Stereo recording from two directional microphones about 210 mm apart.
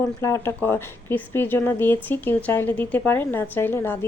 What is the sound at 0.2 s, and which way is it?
A woman's voice, 15° left (ahead or behind).